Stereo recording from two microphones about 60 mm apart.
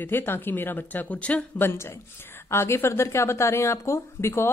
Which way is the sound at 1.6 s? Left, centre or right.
Left.